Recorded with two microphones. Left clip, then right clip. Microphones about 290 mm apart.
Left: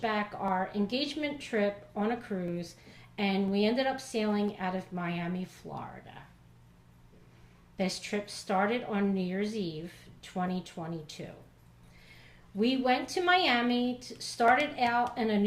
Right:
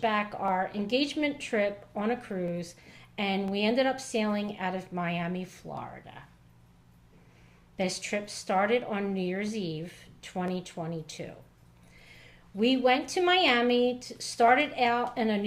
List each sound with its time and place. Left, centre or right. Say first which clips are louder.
0.0 s a woman's voice: right 3 dB; right
7.8 s a woman's voice: right 2 dB; right